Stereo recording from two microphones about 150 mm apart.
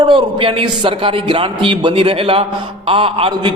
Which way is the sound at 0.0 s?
35° right (ahead or behind).